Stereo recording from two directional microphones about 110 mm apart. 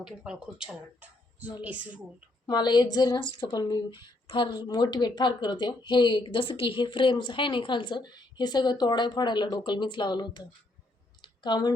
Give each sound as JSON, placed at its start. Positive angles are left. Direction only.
{"t": 0.0, "sound": "speech", "side_deg": -5}
{"t": 2.5, "sound": "speech", "side_deg": 40}
{"t": 11.2, "sound": "clicking", "side_deg": 40}